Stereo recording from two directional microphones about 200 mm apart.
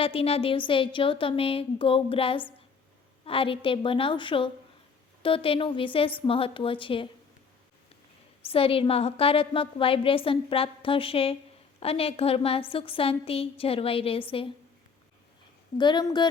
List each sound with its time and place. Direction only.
0.0 s a woman's voice: 30° left (ahead or behind)
8.4 s a woman's voice: 30° left (ahead or behind)
15.8 s a woman's voice: 20° left (ahead or behind)